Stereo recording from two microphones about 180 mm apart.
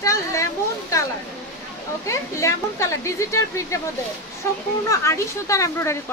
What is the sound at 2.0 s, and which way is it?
A woman's voice, 15° left (ahead or behind).